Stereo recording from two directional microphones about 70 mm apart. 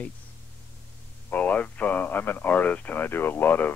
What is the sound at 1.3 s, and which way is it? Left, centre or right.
Speech, left.